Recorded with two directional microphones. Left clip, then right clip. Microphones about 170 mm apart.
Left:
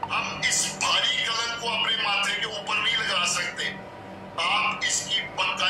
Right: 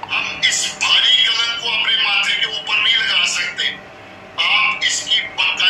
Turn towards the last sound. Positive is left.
turn(degrees=40)  # may be behind; listen again after turning